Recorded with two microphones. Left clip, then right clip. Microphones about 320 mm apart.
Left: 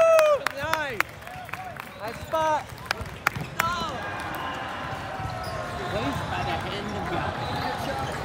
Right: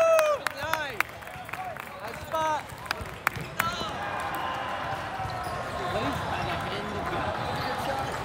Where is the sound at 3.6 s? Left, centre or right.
Centre.